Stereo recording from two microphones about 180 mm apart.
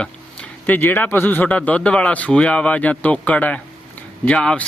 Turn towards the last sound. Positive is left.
turn(degrees=5)  # may be behind; listen again after turning